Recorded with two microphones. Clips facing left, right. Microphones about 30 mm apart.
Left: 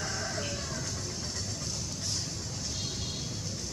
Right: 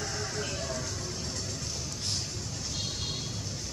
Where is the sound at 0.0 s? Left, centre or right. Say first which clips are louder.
Even; centre.